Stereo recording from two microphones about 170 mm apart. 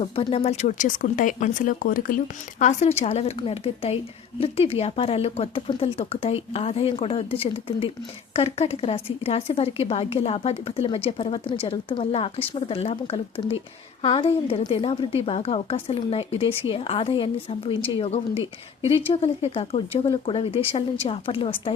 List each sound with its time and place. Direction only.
0.0 s speech: 35° left (ahead or behind)